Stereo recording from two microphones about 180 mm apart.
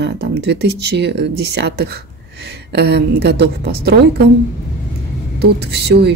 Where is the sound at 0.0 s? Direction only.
70° right (ahead or behind).